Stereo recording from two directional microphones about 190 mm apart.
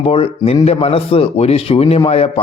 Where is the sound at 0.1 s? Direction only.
30° left (ahead or behind).